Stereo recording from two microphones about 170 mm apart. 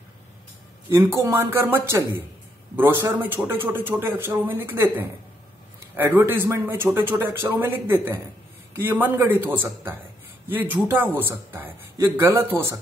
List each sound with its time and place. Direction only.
0.8 s a man's voice: 15° right (ahead or behind)
10.5 s a man's voice: 10° right (ahead or behind)